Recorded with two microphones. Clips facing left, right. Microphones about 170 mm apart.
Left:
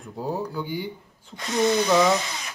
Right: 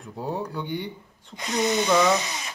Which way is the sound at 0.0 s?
Centre (ahead or behind).